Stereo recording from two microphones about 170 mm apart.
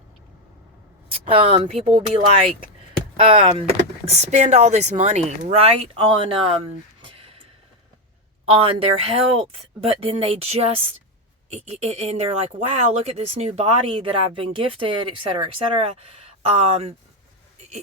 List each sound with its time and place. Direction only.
1.2 s speech: 35° right (ahead or behind)
7.0 s a sound: 35° right (ahead or behind)
8.4 s speech: 35° right (ahead or behind)